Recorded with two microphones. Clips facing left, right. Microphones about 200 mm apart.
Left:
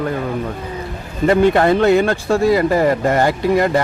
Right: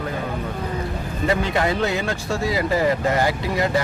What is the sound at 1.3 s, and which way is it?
Speech, 55° left (ahead or behind).